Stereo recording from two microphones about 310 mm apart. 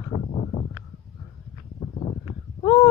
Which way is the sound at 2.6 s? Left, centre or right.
Centre.